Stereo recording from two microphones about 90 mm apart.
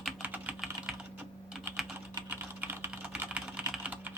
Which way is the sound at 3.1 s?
15° right (ahead or behind).